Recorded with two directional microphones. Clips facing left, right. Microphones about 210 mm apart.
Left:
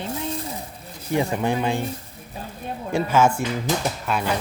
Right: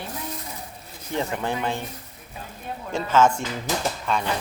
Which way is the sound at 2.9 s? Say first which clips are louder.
Left 1 dB; 10° left (ahead or behind).